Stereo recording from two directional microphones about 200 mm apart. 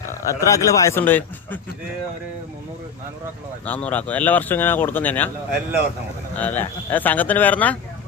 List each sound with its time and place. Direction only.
0.3 s speech: 15° left (ahead or behind)
3.7 s speech: 5° left (ahead or behind)
6.4 s speech: 10° left (ahead or behind)